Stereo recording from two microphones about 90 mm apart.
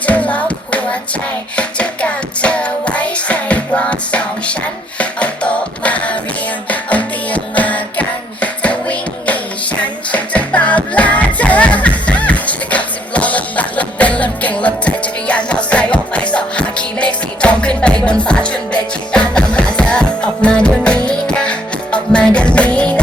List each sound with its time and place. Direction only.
0.0 s music: 15° left (ahead or behind)